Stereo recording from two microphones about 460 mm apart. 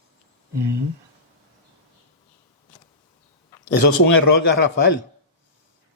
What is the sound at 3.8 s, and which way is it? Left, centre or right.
Speech, left.